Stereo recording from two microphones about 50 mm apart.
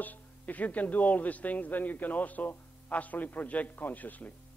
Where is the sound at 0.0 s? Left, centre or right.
Left.